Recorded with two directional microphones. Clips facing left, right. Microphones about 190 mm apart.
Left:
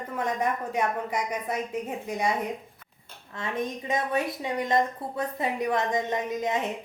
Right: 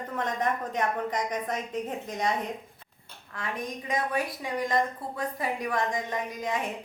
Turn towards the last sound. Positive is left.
turn(degrees=20)  # may be behind; listen again after turning